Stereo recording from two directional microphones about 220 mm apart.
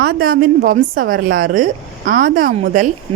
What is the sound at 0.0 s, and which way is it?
A woman's voice, 40° right (ahead or behind).